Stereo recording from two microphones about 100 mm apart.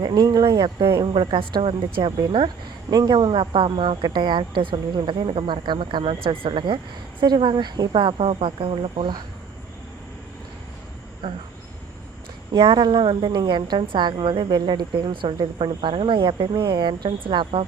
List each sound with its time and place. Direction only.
0.0 s speech: 45° right (ahead or behind)
2.9 s speech: 45° right (ahead or behind); by 9.1 s 70° right (ahead or behind)
11.2 s speech: 55° right (ahead or behind)
12.5 s speech: 55° right (ahead or behind)